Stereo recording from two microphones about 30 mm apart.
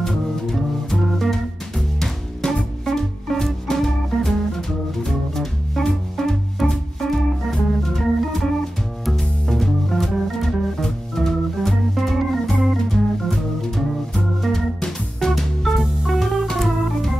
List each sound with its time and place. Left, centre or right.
0.0 s music: centre
10.8 s organ: centre
14.9 s music: centre
16.5 s organ: centre